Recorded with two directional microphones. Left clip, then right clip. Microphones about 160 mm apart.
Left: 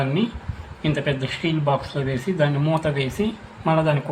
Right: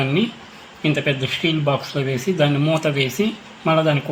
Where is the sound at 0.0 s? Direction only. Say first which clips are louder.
Right 3 dB; 35° right (ahead or behind).